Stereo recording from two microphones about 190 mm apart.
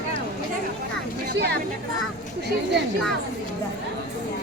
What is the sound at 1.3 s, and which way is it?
Speech, 60° right (ahead or behind).